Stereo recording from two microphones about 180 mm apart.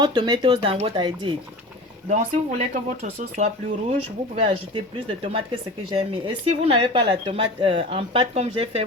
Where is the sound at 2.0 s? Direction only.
40° right (ahead or behind).